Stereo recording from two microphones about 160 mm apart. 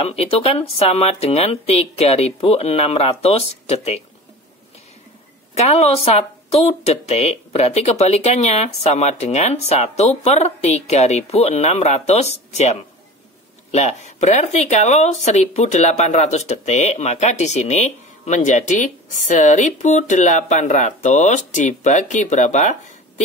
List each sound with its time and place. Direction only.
0.0 s speech: 40° left (ahead or behind)
5.6 s speech: 40° left (ahead or behind)